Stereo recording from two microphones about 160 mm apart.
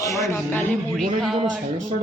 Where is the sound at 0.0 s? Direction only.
20° left (ahead or behind).